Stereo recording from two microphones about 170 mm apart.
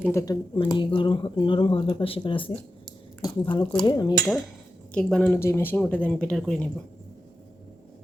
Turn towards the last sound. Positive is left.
turn(degrees=5)  # may be behind; listen again after turning